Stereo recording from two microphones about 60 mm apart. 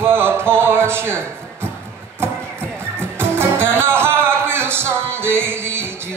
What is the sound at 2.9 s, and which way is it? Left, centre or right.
Music, right.